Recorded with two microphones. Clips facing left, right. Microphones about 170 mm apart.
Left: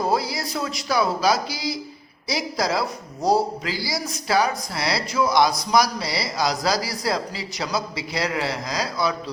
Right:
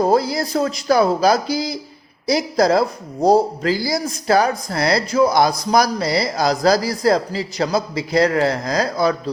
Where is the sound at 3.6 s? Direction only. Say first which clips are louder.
Right 8 dB; 45° right (ahead or behind).